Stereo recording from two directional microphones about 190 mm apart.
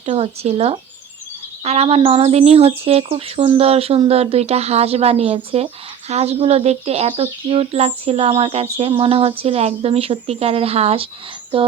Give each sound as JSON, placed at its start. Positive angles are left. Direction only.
{"t": 0.0, "sound": "speech", "side_deg": -35}
{"t": 8.8, "sound": "a sound", "side_deg": -30}
{"t": 9.4, "sound": "speech", "side_deg": -30}